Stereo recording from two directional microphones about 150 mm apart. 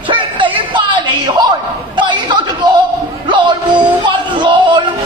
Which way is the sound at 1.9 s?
30° right (ahead or behind).